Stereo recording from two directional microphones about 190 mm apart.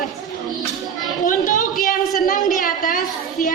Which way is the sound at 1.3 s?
45° left (ahead or behind).